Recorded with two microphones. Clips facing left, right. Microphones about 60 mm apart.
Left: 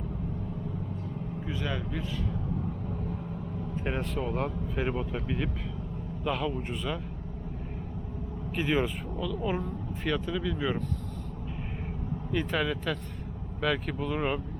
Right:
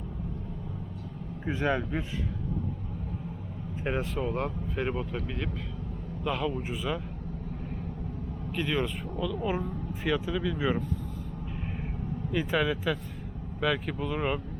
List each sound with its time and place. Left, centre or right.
1.5 s a man's voice: right
3.8 s speech: centre
8.5 s speech: centre
9.1 s speech: centre
12.3 s speech: centre